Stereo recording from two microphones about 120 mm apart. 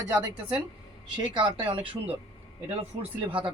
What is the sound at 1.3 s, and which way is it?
Speech, 45° right (ahead or behind).